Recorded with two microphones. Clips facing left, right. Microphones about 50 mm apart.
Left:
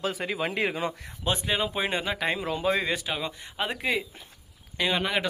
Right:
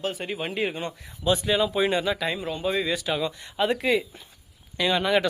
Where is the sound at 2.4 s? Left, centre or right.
Left.